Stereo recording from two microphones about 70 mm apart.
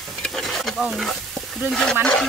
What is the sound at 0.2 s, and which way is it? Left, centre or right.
Stir, centre.